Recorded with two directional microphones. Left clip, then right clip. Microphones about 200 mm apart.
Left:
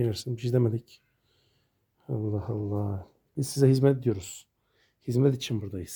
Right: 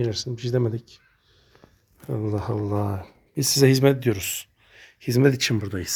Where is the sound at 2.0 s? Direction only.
10° left (ahead or behind).